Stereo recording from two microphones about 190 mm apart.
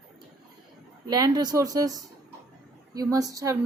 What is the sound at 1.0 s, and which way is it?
A woman's voice, 20° right (ahead or behind).